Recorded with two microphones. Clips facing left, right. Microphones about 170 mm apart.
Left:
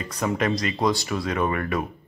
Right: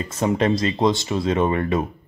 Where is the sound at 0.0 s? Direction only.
25° right (ahead or behind).